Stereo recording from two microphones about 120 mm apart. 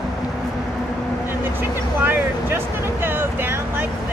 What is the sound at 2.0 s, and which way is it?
Speech, 20° right (ahead or behind).